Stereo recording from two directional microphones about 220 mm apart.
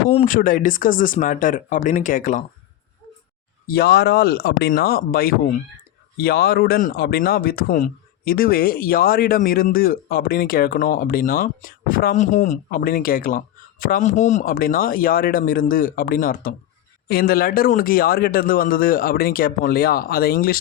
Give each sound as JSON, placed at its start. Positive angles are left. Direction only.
{"t": 0.3, "sound": "speech", "side_deg": 40}
{"t": 3.7, "sound": "speech", "side_deg": 45}